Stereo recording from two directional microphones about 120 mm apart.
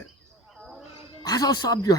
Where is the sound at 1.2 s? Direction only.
30° left (ahead or behind).